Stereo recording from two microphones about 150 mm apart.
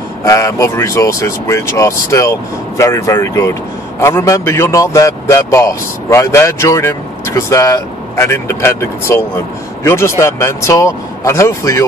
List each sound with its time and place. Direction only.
0.2 s a man's voice: 20° left (ahead or behind)